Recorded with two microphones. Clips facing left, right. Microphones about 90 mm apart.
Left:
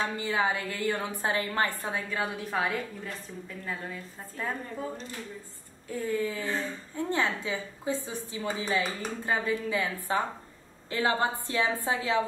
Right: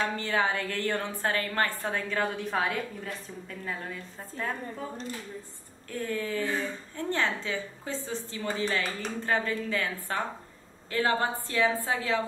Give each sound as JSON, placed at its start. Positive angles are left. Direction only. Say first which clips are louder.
{"t": 0.0, "sound": "a woman's voice", "louder": "even", "side_deg": 10}
{"t": 5.9, "sound": "a woman's voice", "louder": "left 2 dB", "side_deg": 10}